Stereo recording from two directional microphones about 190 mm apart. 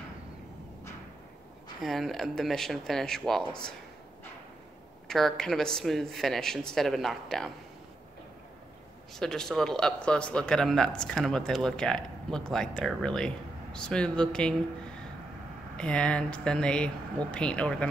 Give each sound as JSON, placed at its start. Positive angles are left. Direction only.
{"t": 1.8, "sound": "speech", "side_deg": 0}
{"t": 5.0, "sound": "speech", "side_deg": 0}
{"t": 9.1, "sound": "speech", "side_deg": 0}